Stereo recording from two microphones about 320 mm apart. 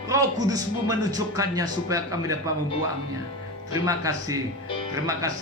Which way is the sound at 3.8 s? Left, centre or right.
Centre.